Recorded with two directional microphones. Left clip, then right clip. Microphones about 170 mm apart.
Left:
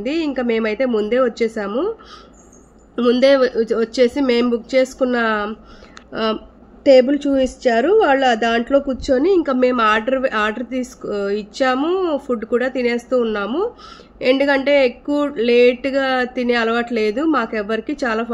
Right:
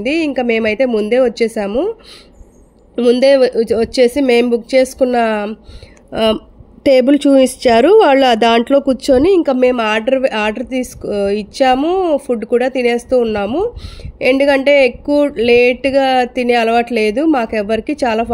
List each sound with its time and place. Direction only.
0.0 s speech: 40° right (ahead or behind)
3.0 s speech: 35° right (ahead or behind)
6.8 s speech: 60° right (ahead or behind); by 18.3 s 35° right (ahead or behind)